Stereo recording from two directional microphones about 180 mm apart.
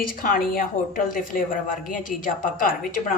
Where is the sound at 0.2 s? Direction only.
50° left (ahead or behind).